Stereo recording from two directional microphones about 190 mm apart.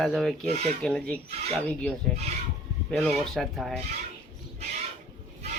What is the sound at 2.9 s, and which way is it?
Speech, 5° left (ahead or behind).